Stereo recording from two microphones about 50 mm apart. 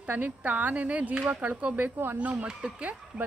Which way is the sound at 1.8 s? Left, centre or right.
Right.